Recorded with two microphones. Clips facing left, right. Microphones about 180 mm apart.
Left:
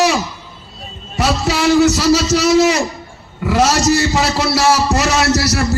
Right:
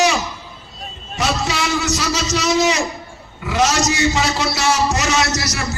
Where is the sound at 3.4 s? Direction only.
55° left (ahead or behind).